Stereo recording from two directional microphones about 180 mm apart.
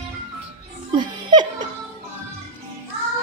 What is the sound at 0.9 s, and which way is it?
Laughter, 25° right (ahead or behind).